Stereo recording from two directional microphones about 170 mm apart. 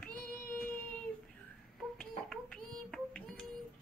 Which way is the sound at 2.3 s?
5° left (ahead or behind).